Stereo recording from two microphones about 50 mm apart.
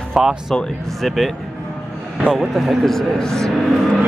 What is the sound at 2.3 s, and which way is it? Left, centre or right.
A man's voice, centre.